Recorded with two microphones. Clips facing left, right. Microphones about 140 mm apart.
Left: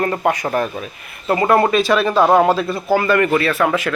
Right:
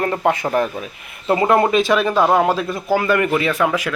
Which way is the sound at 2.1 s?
5° left (ahead or behind).